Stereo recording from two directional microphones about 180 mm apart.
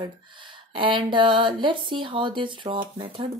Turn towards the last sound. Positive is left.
turn(degrees=-30)  # may be behind; listen again after turning